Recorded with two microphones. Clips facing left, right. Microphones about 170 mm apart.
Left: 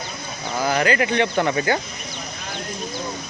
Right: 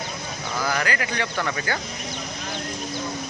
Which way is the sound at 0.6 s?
20° left (ahead or behind).